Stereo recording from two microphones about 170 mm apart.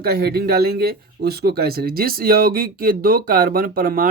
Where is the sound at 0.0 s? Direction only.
65° right (ahead or behind).